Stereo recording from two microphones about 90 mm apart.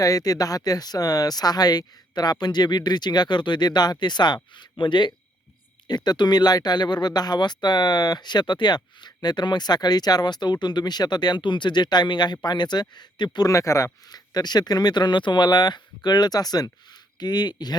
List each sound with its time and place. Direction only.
0.0 s speech: 40° left (ahead or behind)
13.5 s speech: 35° left (ahead or behind)